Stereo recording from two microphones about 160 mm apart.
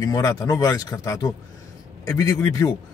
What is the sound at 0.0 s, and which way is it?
Speech, 20° left (ahead or behind).